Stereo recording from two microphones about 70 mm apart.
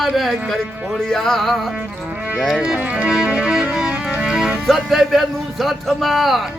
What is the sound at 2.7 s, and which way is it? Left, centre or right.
Speech, centre.